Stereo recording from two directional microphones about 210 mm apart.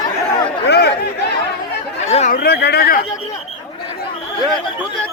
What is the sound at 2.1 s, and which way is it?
Chatter, 35° left (ahead or behind).